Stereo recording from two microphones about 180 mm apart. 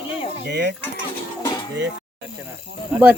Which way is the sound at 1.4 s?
20° left (ahead or behind).